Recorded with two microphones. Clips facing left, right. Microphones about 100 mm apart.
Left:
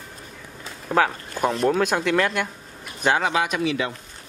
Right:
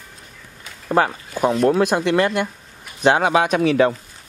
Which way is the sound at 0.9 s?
5° right (ahead or behind).